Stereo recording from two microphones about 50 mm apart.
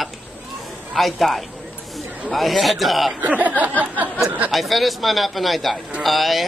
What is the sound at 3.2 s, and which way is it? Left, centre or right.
Speech, right.